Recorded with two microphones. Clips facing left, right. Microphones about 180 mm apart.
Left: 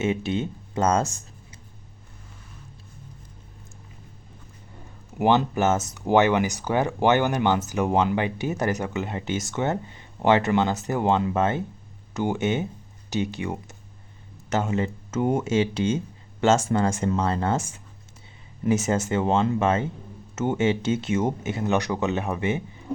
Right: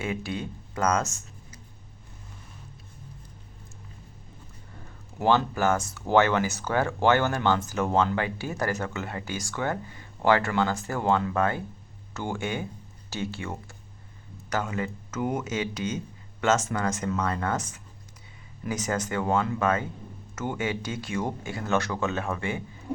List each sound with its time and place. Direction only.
0.0 s speech: 25° left (ahead or behind)
5.2 s speech: 20° left (ahead or behind)